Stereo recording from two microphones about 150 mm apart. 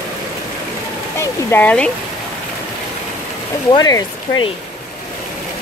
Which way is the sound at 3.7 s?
25° left (ahead or behind).